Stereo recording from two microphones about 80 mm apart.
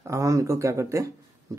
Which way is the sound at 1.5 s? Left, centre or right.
Right.